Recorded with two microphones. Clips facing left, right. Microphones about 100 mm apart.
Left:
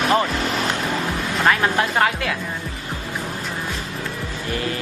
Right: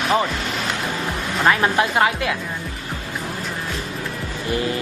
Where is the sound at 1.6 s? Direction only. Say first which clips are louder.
Right 1 dB; 15° right (ahead or behind).